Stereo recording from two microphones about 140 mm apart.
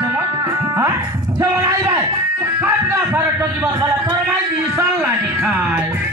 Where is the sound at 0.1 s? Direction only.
15° right (ahead or behind).